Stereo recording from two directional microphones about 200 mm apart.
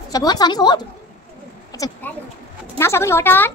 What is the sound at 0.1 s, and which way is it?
A child's voice, 20° left (ahead or behind).